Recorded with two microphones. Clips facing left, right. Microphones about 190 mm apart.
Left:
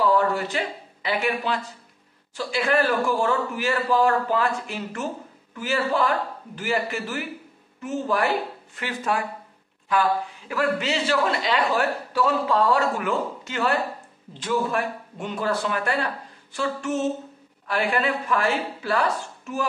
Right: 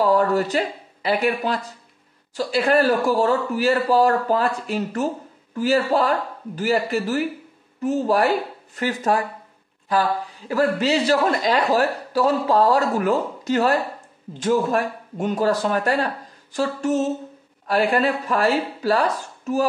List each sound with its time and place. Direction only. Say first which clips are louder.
0.0 s speech: right 3 dB; 40° right (ahead or behind)